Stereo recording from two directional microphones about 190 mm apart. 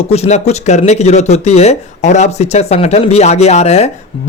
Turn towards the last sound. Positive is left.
turn(degrees=35)  # may be behind; listen again after turning